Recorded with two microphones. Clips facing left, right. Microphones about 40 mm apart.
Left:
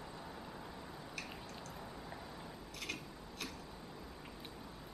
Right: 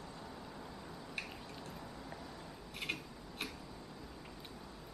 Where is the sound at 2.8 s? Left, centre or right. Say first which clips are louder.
Right 4 dB; right.